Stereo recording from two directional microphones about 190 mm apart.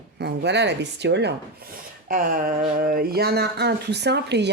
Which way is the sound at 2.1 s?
45° right (ahead or behind).